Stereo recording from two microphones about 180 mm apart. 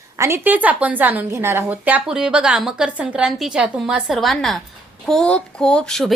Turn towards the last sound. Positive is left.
turn(degrees=0)  # may be behind; listen again after turning